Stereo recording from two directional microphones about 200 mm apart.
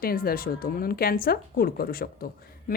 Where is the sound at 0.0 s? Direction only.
45° left (ahead or behind).